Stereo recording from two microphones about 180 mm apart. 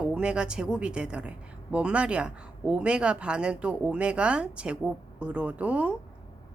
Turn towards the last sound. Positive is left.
turn(degrees=-5)  # may be behind; listen again after turning